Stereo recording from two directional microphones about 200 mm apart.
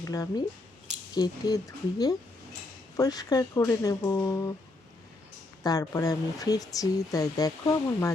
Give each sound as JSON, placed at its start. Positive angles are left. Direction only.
{"t": 0.0, "sound": "speech", "side_deg": 15}
{"t": 5.6, "sound": "speech", "side_deg": 15}